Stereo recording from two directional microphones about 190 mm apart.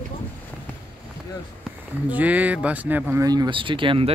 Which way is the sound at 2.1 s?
10° right (ahead or behind).